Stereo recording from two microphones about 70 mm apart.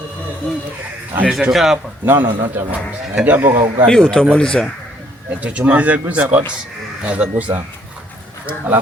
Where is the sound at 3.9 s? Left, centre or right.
Centre.